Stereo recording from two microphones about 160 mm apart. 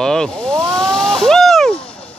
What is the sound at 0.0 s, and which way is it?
Vehicle, 5° left (ahead or behind).